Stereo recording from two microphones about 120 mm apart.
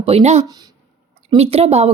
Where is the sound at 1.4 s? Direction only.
55° right (ahead or behind).